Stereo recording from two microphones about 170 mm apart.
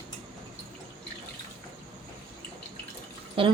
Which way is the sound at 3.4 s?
30° right (ahead or behind).